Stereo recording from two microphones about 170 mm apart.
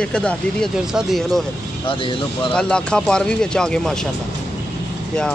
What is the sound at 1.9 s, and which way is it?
Speech, 30° left (ahead or behind).